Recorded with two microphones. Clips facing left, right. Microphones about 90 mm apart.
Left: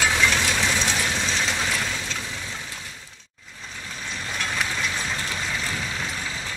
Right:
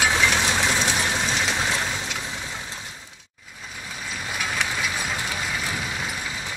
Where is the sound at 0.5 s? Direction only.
15° right (ahead or behind).